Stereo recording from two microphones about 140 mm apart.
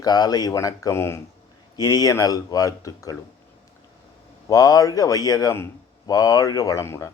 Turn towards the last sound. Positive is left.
turn(degrees=20)  # may be behind; listen again after turning